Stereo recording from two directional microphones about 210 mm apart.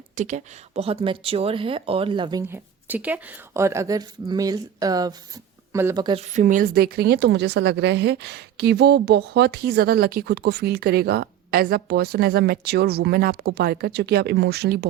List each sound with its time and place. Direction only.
0.2 s speech: 35° right (ahead or behind)
2.5 s a woman's voice: 10° right (ahead or behind)
6.3 s a woman's voice: 40° right (ahead or behind)